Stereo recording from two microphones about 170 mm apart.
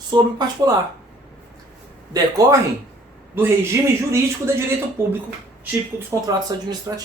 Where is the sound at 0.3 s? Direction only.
25° right (ahead or behind).